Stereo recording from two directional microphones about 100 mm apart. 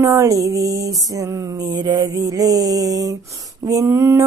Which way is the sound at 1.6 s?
45° right (ahead or behind).